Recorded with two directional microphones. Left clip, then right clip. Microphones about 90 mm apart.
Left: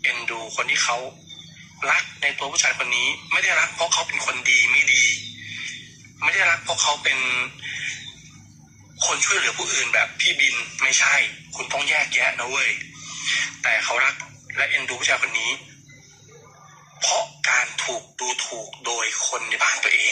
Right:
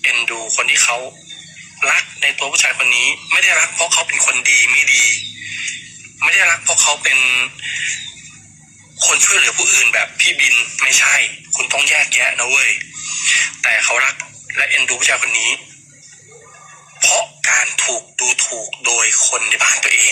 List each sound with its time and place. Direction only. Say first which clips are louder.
0.1 s a man's voice: right 9 dB; 25° right (ahead or behind)
17.0 s speech: right 7 dB; 20° right (ahead or behind)